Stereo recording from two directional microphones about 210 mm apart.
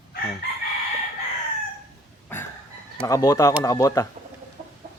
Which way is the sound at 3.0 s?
15° left (ahead or behind).